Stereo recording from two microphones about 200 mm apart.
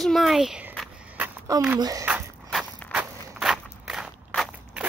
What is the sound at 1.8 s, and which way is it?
Speech, 20° right (ahead or behind).